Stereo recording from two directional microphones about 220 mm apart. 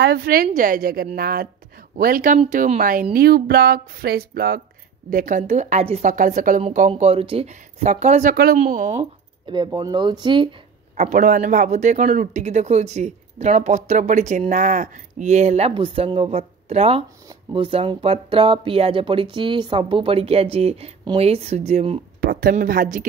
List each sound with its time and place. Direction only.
0.0 s a woman's voice: 45° right (ahead or behind)
9.5 s speech: 20° right (ahead or behind)
11.0 s a woman's voice: 35° right (ahead or behind)
22.2 s a woman's voice: 40° right (ahead or behind)